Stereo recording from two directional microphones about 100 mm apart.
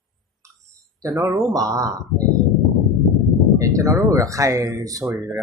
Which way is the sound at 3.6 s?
35° right (ahead or behind).